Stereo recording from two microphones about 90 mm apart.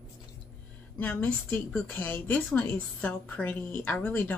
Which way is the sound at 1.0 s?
20° left (ahead or behind).